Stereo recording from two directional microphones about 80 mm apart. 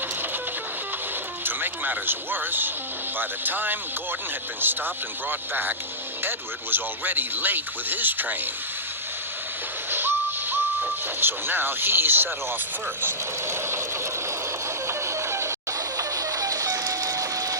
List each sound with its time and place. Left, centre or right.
1.5 s speech: right
9.9 s a sound: right
11.2 s speech: right
13.0 s mechanisms: right
14.8 s a sound: right
16.0 s printer: right